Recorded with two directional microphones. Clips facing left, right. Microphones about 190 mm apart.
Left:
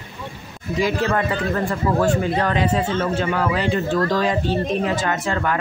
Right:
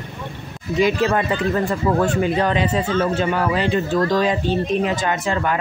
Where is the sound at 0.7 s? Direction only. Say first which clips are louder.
Right 3 dB; 20° right (ahead or behind).